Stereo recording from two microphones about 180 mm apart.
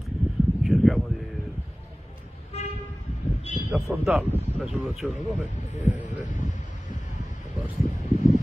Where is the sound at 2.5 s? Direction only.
35° left (ahead or behind).